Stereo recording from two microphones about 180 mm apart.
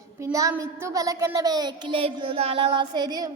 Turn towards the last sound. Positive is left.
turn(degrees=-20)  # may be behind; listen again after turning